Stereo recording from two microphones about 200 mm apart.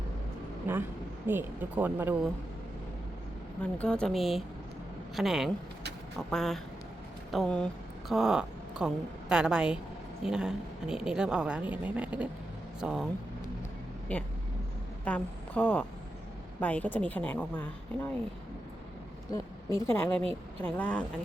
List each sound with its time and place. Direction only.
0.7 s speech: 10° right (ahead or behind)
3.6 s a woman's voice: 5° left (ahead or behind)
14.1 s a woman's voice: 5° left (ahead or behind)
19.3 s a woman's voice: 20° left (ahead or behind)